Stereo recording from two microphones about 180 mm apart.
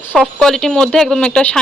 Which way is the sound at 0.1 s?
Centre (ahead or behind).